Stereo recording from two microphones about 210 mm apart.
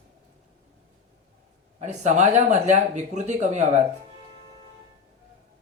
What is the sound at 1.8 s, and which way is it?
A man's voice, 35° right (ahead or behind).